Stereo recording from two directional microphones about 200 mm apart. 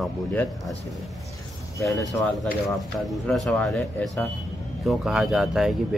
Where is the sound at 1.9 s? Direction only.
15° left (ahead or behind).